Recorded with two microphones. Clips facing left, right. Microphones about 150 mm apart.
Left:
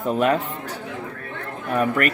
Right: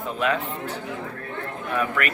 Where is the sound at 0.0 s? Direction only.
45° left (ahead or behind).